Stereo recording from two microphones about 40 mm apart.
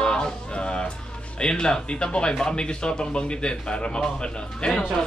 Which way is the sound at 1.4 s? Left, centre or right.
Centre.